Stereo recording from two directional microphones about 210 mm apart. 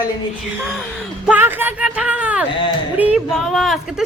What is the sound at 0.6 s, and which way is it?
A woman's voice, centre (ahead or behind).